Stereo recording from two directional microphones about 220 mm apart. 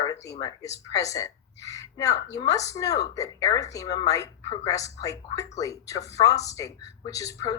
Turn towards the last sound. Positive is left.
turn(degrees=15)  # may be behind; listen again after turning